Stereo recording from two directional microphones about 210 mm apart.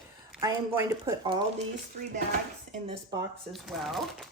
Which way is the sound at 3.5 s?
Centre (ahead or behind).